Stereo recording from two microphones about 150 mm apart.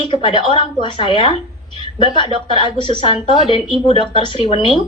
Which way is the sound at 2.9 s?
35° left (ahead or behind).